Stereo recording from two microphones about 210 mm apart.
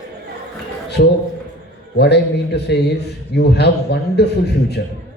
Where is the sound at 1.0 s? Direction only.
50° left (ahead or behind).